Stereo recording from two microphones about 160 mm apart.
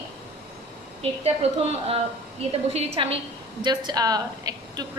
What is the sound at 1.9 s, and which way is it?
A woman's voice, 40° right (ahead or behind).